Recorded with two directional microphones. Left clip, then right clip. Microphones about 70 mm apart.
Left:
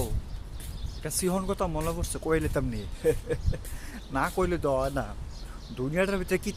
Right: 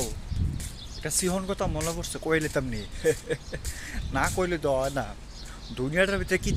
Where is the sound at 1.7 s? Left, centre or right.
Left.